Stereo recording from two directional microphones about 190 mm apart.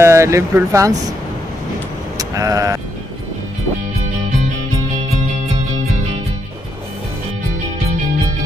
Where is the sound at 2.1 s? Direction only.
15° right (ahead or behind).